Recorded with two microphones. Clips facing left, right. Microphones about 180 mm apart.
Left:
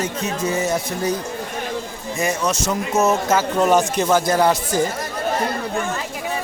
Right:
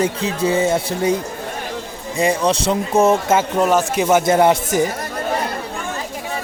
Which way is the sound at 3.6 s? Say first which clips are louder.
Even; 5° right (ahead or behind).